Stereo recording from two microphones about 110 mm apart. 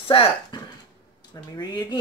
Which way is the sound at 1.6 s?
35° left (ahead or behind).